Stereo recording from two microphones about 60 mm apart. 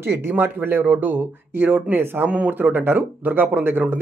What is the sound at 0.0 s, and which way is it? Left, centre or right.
Speech, right.